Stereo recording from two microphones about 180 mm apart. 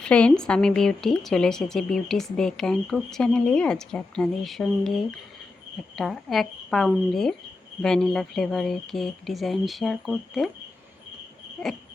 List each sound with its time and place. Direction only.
0.0 s a woman's voice: 5° left (ahead or behind)
11.6 s cricket: 5° left (ahead or behind)